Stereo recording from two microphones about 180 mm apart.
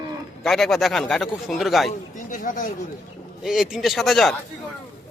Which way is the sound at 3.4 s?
Centre (ahead or behind).